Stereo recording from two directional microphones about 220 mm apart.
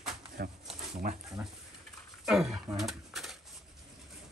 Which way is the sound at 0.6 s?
30° right (ahead or behind).